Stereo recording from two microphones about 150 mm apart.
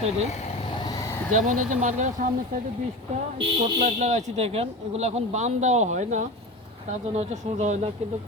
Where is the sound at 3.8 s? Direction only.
55° right (ahead or behind).